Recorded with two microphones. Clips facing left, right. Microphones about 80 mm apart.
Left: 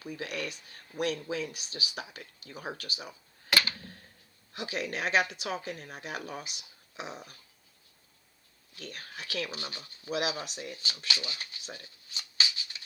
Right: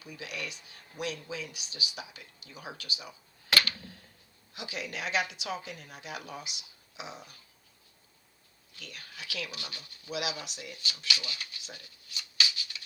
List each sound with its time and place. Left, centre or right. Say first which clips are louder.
0.0 s speech: left 4 dB; left
4.5 s speech: left 4 dB; left
8.8 s speech: left 4 dB; left